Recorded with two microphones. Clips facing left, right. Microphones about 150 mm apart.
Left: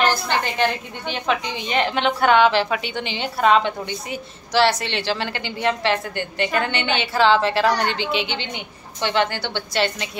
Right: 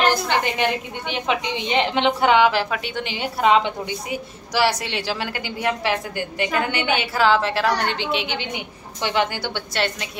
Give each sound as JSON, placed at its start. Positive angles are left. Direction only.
{"t": 0.1, "sound": "a sound", "side_deg": -15}
{"t": 1.1, "sound": "a woman's voice", "side_deg": -15}
{"t": 2.5, "sound": "a woman's voice", "side_deg": 0}
{"t": 3.3, "sound": "a woman's voice", "side_deg": -15}
{"t": 9.8, "sound": "a woman's voice", "side_deg": 0}